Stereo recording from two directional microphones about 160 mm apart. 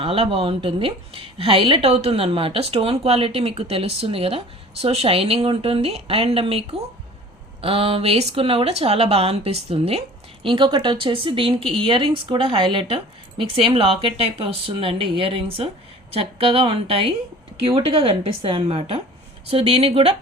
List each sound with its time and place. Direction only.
0.0 s a woman's voice: 35° right (ahead or behind)